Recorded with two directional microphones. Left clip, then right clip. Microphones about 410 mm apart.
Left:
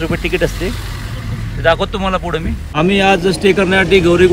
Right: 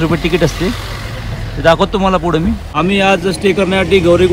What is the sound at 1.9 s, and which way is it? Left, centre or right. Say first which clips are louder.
Speech: right 5 dB; centre.